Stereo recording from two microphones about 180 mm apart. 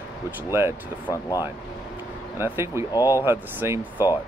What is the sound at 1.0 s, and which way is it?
Speech, 20° left (ahead or behind).